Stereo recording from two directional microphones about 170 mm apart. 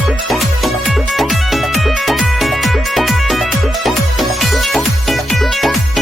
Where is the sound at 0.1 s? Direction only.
Centre (ahead or behind).